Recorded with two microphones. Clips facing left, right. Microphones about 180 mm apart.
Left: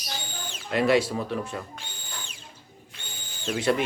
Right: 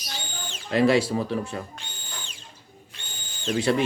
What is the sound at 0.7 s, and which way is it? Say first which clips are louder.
Speech: right 2 dB; 30° right (ahead or behind).